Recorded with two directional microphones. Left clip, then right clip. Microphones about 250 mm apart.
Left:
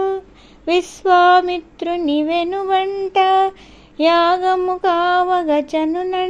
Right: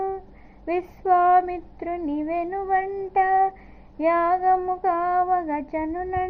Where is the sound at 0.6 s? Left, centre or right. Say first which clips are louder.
Left 9 dB; left.